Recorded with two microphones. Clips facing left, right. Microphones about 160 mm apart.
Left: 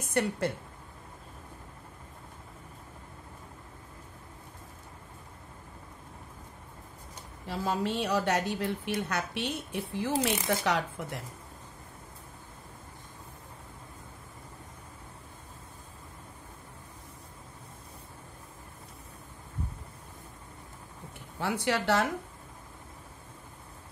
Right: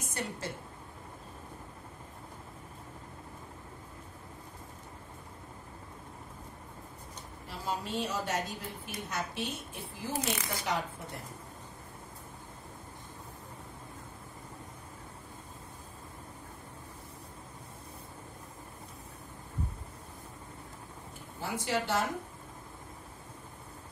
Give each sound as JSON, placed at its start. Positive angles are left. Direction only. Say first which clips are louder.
{"t": 0.0, "sound": "a woman's voice", "louder": "left 9 dB", "side_deg": 60}
{"t": 7.4, "sound": "a woman's voice", "louder": "left 6 dB", "side_deg": 65}
{"t": 21.4, "sound": "a woman's voice", "louder": "left 3 dB", "side_deg": 70}